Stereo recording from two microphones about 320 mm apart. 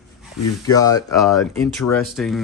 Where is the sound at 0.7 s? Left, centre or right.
Centre.